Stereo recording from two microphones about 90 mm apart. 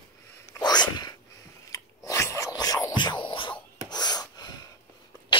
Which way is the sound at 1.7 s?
35° left (ahead or behind).